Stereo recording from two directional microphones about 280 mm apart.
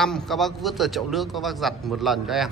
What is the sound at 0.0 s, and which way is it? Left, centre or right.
A man's voice, centre.